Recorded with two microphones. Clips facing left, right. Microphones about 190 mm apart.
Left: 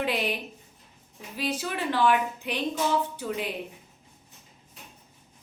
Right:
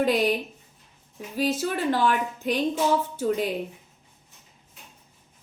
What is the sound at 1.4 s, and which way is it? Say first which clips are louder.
A woman's voice: right 5 dB; 40° right (ahead or behind).